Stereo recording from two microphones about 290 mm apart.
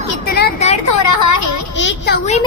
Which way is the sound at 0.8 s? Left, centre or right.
Left.